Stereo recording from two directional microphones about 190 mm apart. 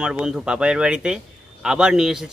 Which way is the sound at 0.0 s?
5° right (ahead or behind).